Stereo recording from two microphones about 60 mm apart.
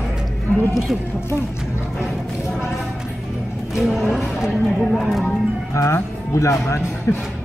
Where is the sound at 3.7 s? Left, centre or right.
Centre.